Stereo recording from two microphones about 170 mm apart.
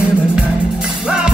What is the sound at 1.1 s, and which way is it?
Music, 5° right (ahead or behind).